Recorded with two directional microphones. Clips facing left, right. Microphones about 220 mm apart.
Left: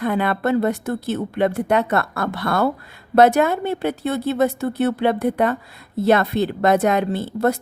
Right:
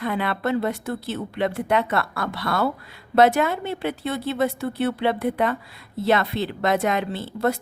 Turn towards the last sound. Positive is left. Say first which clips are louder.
# left 4 dB
turn(degrees=45)  # may be behind; listen again after turning